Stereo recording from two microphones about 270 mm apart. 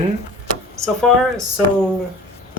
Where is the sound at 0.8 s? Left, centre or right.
Centre.